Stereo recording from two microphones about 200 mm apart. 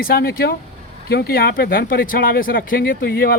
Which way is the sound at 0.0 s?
50° left (ahead or behind).